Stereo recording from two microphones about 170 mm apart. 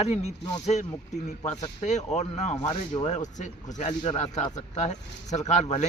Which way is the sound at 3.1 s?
45° left (ahead or behind).